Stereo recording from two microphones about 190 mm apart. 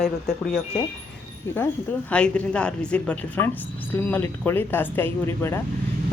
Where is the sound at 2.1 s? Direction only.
5° left (ahead or behind).